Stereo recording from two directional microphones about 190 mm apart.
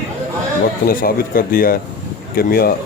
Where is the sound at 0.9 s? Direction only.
50° left (ahead or behind).